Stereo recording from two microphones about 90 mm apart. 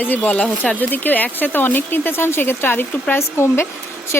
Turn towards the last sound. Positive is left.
turn(degrees=25)  # may be behind; listen again after turning